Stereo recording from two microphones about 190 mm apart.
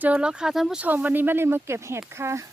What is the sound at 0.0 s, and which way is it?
Speech, 5° right (ahead or behind).